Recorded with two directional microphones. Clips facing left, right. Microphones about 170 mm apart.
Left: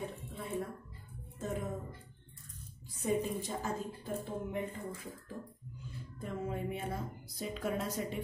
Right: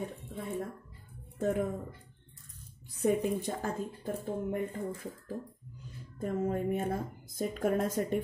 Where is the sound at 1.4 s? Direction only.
60° right (ahead or behind).